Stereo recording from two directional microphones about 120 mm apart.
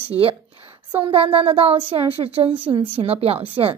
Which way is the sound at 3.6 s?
40° right (ahead or behind).